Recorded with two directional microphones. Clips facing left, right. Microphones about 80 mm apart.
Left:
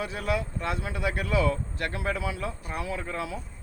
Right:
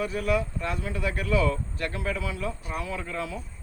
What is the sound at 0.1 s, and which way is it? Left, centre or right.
Speech, left.